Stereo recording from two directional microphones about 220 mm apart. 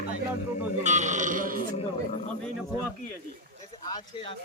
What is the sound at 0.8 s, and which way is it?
Sheep, 30° right (ahead or behind).